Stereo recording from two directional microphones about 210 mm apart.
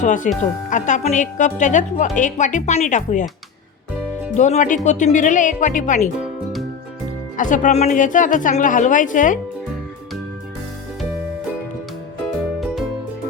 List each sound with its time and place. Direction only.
0.0 s speech: 35° left (ahead or behind)
4.4 s speech: 35° left (ahead or behind)
6.1 s music: centre (ahead or behind)
7.3 s speech: 40° left (ahead or behind)